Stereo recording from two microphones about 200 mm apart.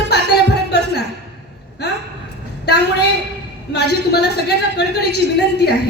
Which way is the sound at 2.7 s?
55° left (ahead or behind).